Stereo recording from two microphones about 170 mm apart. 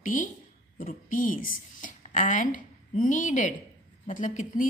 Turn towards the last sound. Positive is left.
turn(degrees=50)  # may be behind; listen again after turning